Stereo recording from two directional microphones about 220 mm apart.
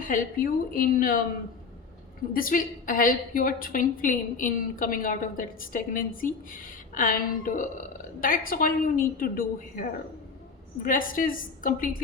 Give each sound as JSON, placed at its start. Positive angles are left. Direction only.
{"t": 0.0, "sound": "a woman's voice", "side_deg": 40}
{"t": 2.3, "sound": "a woman's voice", "side_deg": 40}
{"t": 10.8, "sound": "a woman's voice", "side_deg": 40}